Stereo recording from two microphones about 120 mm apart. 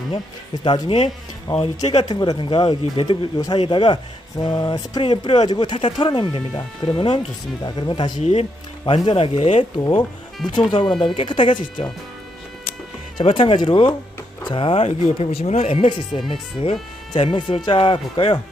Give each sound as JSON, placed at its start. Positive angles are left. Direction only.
{"t": 0.6, "sound": "speech", "side_deg": 40}
{"t": 8.2, "sound": "speech", "side_deg": 65}
{"t": 8.9, "sound": "speech", "side_deg": 45}
{"t": 9.7, "sound": "speech", "side_deg": 35}
{"t": 13.1, "sound": "speech", "side_deg": 45}